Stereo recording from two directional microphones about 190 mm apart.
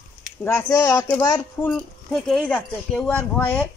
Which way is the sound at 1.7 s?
Centre (ahead or behind).